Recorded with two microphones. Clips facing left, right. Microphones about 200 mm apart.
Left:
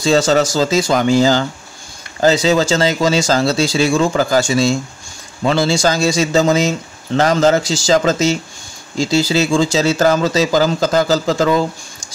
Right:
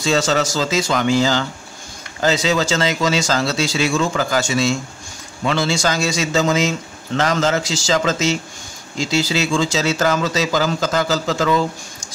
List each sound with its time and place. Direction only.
0.0 s speech: 35° left (ahead or behind)